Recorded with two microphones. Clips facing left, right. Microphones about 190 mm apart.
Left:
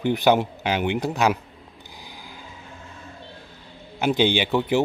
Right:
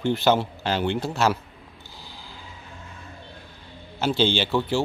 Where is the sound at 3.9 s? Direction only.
15° left (ahead or behind).